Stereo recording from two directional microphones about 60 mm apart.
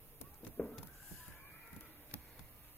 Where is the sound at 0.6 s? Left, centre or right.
Left.